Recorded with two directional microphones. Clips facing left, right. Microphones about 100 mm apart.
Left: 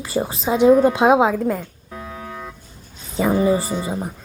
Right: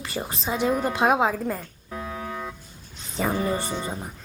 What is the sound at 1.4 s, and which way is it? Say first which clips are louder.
Music: left 7 dB; centre (ahead or behind).